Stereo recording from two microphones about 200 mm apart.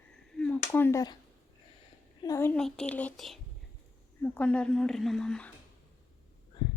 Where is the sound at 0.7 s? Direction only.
15° left (ahead or behind).